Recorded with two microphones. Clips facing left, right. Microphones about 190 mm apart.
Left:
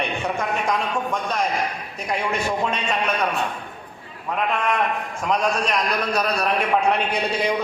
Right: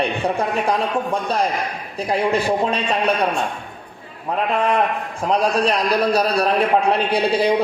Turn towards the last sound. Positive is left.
turn(degrees=-35)  # may be behind; listen again after turning